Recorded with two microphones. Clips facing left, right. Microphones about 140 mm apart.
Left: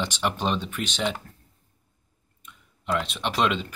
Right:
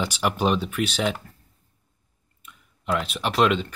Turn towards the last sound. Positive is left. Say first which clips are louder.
# right 4 dB
turn(degrees=0)  # may be behind; listen again after turning